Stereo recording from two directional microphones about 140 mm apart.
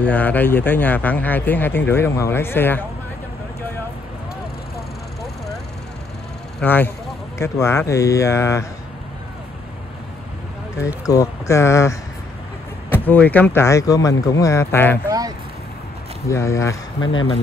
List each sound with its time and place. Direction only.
0.0 s speech: 10° left (ahead or behind)
6.6 s speech: 15° left (ahead or behind)
11.1 s speech: 25° left (ahead or behind)
15.0 s a sound: 25° right (ahead or behind)
16.3 s speech: 20° left (ahead or behind)